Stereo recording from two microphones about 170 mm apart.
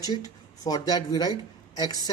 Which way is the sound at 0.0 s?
20° left (ahead or behind).